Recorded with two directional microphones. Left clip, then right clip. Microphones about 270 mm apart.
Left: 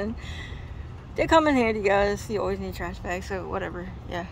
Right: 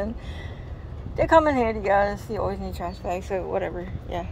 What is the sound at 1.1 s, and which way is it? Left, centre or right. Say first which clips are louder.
Speech: right 2 dB; centre.